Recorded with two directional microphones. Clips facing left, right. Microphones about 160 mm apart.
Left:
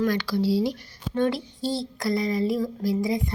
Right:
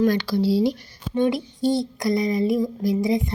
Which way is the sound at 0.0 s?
25° right (ahead or behind).